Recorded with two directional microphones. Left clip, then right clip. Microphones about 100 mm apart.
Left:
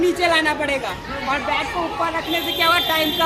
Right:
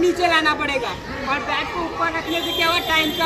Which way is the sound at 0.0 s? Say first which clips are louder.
Even; 30° left (ahead or behind).